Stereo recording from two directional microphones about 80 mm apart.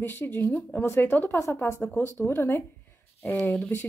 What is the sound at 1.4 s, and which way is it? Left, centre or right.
Speech, left.